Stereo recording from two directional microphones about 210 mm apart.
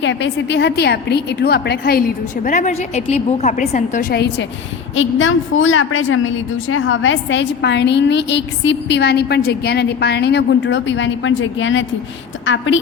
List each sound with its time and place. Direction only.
0.0 s a woman's voice: 60° left (ahead or behind)
4.9 s a woman's voice: 65° left (ahead or behind)